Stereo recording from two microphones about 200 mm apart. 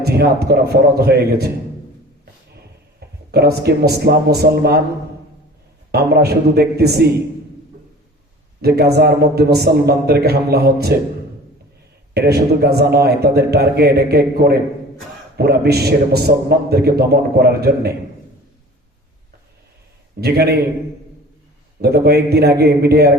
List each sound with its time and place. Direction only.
0.0 s a man's voice: 55° right (ahead or behind)
3.0 s a sound: 50° right (ahead or behind)
3.3 s a man's voice: 55° right (ahead or behind)
5.9 s a man's voice: 50° right (ahead or behind)
8.6 s a man's voice: 55° right (ahead or behind)
12.1 s a man's voice: 50° right (ahead or behind)
20.2 s a man's voice: 55° right (ahead or behind)
21.8 s a man's voice: 55° right (ahead or behind)